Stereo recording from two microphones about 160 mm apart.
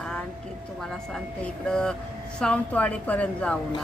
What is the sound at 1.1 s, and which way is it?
Vehicle, 5° left (ahead or behind).